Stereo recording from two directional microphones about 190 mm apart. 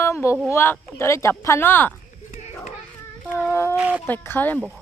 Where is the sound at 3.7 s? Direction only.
5° right (ahead or behind).